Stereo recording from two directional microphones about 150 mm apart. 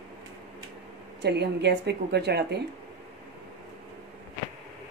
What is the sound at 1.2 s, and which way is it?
A woman's voice, 90° right.